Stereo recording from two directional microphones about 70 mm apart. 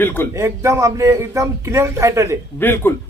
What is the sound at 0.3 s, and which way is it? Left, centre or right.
Speech, right.